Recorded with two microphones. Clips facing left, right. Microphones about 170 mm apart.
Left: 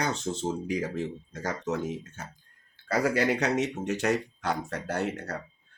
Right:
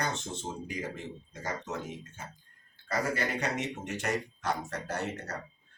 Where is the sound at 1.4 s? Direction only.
75° left (ahead or behind).